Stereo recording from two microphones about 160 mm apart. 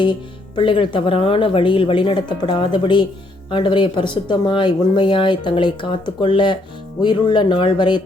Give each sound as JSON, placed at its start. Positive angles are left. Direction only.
{"t": 0.0, "sound": "speech", "side_deg": 30}